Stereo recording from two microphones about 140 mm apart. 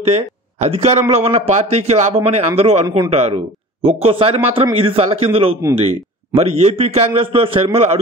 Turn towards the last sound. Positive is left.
turn(degrees=-45)  # may be behind; listen again after turning